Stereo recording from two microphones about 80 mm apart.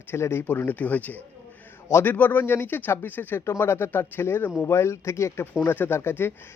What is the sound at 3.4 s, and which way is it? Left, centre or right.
Speech, left.